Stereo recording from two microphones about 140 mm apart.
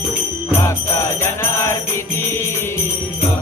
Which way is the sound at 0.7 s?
20° left (ahead or behind).